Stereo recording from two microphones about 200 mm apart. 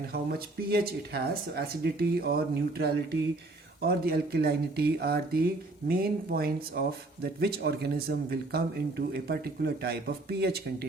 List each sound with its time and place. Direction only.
0.1 s speech: 50° right (ahead or behind)